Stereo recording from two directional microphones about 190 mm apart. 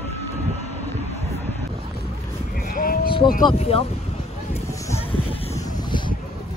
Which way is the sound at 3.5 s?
30° left (ahead or behind).